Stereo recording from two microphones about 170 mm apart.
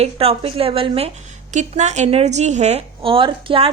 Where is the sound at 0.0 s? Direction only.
35° right (ahead or behind).